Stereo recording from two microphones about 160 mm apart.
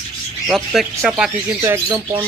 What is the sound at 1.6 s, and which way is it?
Speech, 15° right (ahead or behind).